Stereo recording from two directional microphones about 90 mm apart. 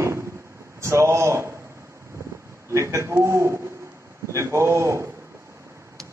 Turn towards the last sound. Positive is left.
turn(degrees=-30)  # may be behind; listen again after turning